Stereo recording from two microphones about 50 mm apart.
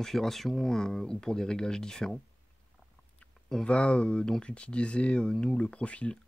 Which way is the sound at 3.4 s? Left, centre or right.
Centre.